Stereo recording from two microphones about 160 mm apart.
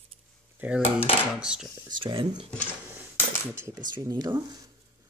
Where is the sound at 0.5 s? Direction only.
5° right (ahead or behind).